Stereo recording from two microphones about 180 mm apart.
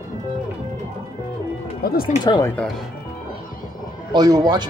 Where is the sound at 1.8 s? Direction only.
55° left (ahead or behind).